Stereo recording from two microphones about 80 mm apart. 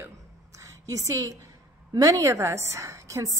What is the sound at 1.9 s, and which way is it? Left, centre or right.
A woman's voice, right.